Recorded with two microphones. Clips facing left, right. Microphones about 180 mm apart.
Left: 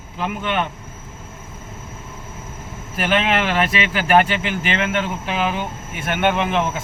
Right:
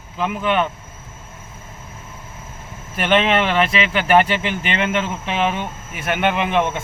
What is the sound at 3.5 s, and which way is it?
Speech, 45° left (ahead or behind).